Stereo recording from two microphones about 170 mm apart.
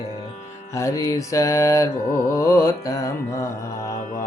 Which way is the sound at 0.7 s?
20° left (ahead or behind).